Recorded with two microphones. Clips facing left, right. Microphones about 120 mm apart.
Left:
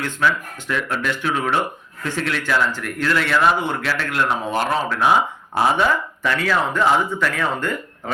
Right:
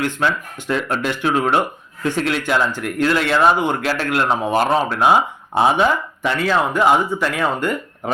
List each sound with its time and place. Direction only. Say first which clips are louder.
0.0 s speech: right 1 dB; 20° right (ahead or behind)
4.7 s speech: right 1 dB; 25° right (ahead or behind)